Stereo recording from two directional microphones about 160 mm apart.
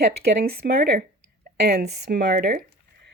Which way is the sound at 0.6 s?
75° right (ahead or behind).